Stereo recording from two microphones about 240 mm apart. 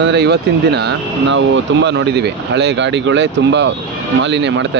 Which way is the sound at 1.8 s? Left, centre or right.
Right.